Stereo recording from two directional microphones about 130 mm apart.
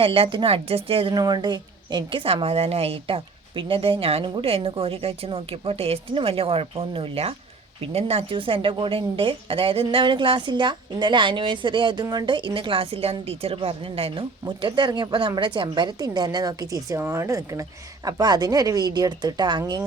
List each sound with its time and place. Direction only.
0.0 s a woman's voice: 45° right (ahead or behind)
1.1 s a woman's voice: 30° right (ahead or behind)